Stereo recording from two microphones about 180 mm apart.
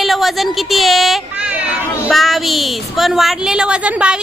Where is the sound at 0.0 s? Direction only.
Centre (ahead or behind).